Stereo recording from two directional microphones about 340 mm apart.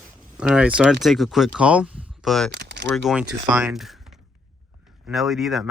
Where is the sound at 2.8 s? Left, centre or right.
Centre.